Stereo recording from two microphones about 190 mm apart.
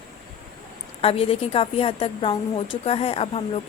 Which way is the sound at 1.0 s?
30° left (ahead or behind).